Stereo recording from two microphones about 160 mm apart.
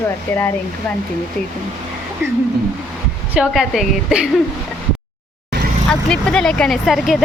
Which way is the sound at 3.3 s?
Centre (ahead or behind).